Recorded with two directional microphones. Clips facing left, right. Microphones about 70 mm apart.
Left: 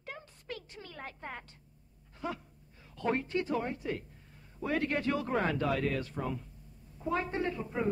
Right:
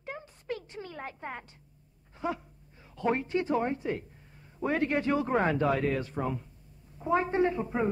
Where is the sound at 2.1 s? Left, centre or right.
Right.